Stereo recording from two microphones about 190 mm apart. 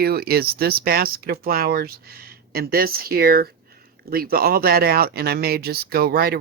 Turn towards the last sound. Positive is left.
turn(degrees=-55)  # may be behind; listen again after turning